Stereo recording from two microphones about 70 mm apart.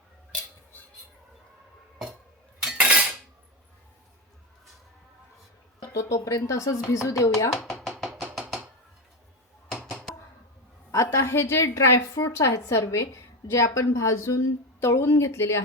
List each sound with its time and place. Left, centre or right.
2.7 s cutlery: centre
5.8 s a woman's voice: left
7.6 s a sound: centre
10.9 s a woman's voice: left